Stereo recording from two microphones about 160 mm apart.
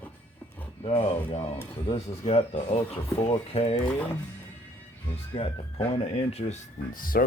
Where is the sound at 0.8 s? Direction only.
40° left (ahead or behind).